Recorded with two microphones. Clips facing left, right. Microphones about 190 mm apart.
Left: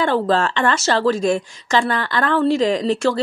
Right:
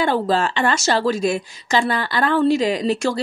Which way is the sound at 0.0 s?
10° right (ahead or behind).